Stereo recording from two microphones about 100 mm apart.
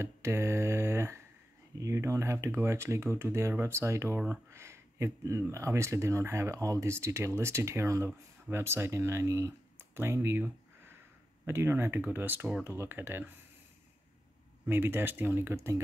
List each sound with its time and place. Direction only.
0.0 s mantra: 30° right (ahead or behind)
1.8 s speech: 30° right (ahead or behind)
14.7 s speech: 20° right (ahead or behind)